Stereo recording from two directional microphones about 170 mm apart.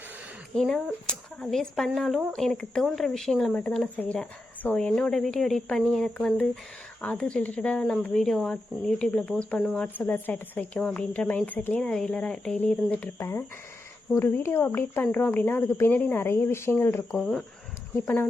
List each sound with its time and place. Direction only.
0.5 s speech: 5° left (ahead or behind)
17.1 s speech: centre (ahead or behind)